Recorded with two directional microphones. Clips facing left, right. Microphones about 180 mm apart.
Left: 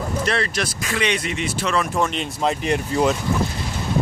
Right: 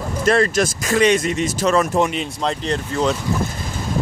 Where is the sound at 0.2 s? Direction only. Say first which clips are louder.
Right 9 dB; 45° right (ahead or behind).